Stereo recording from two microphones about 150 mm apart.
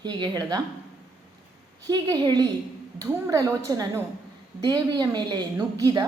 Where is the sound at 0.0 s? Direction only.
30° right (ahead or behind).